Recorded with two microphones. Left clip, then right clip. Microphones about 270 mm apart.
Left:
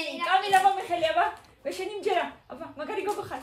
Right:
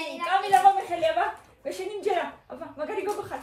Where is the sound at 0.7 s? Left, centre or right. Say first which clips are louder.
Even; left.